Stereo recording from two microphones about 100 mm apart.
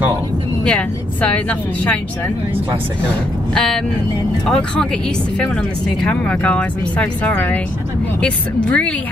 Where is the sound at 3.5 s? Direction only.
5° left (ahead or behind).